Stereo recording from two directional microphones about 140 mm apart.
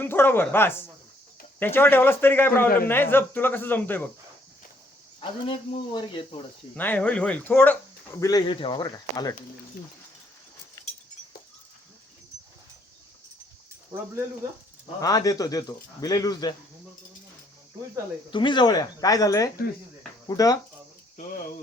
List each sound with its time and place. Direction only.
0.0 s speech: 15° left (ahead or behind)
5.2 s speech: 35° left (ahead or behind)
6.7 s speech: 10° left (ahead or behind)
8.2 s speech: 30° left (ahead or behind)
10.8 s chink: 20° left (ahead or behind)
15.0 s speech: 25° left (ahead or behind)
18.3 s speech: 35° left (ahead or behind)